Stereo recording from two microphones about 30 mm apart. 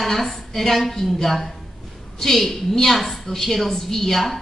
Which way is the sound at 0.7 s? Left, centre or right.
Centre.